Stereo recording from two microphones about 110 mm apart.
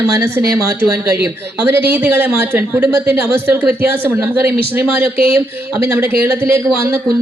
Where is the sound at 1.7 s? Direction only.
20° right (ahead or behind).